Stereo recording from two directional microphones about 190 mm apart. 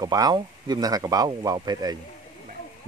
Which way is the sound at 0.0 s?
20° right (ahead or behind).